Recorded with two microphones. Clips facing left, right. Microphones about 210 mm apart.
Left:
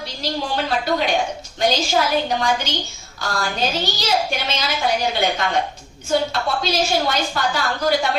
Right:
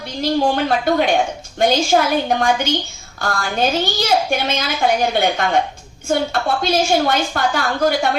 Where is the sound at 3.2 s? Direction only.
55° right (ahead or behind).